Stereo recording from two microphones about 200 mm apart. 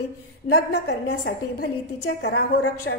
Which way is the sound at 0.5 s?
55° left (ahead or behind).